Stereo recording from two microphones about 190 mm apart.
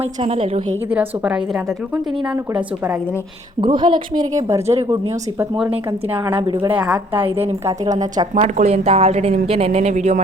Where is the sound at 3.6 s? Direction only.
25° right (ahead or behind).